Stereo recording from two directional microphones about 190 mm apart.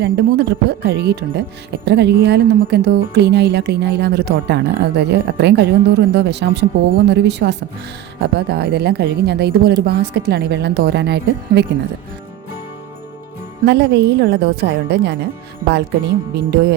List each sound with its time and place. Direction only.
0.0 s speech: 60° right (ahead or behind)
13.7 s speech: 65° right (ahead or behind)
16.3 s speech: 55° right (ahead or behind)